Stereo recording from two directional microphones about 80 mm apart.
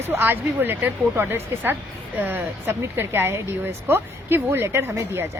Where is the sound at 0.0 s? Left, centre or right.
Right.